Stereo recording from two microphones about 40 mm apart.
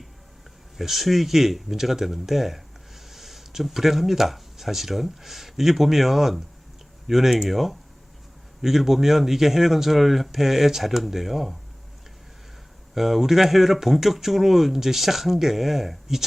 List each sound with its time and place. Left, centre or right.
0.8 s speech: centre
12.9 s speech: centre